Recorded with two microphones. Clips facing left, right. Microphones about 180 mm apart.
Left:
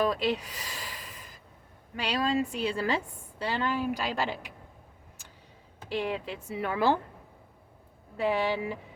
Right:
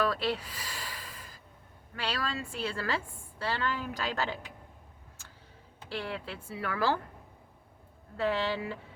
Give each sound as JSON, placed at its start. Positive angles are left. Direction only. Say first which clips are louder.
{"t": 0.0, "sound": "gasp", "louder": "left 3 dB", "side_deg": 15}
{"t": 2.0, "sound": "a woman's voice", "louder": "left 7 dB", "side_deg": 15}
{"t": 5.9, "sound": "a woman's voice", "louder": "left 5 dB", "side_deg": 15}
{"t": 8.1, "sound": "a woman's voice", "louder": "left 3 dB", "side_deg": 15}